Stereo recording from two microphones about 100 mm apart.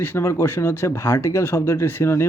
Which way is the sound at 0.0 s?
25° left (ahead or behind).